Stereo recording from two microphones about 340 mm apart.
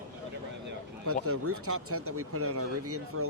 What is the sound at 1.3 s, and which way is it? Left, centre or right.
Speech, right.